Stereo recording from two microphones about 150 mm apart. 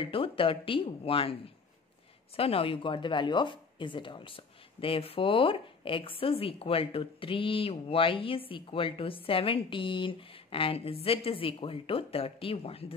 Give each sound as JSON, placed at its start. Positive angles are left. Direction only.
{"t": 0.0, "sound": "speech", "side_deg": 35}